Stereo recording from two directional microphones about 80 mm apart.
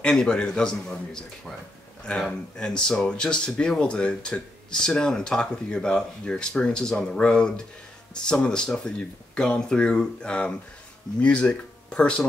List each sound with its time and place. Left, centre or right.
0.0 s speech: centre